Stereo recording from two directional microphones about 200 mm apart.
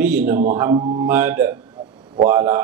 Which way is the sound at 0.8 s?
25° right (ahead or behind).